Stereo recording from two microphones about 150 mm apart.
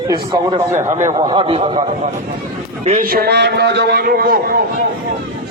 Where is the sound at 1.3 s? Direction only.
35° right (ahead or behind).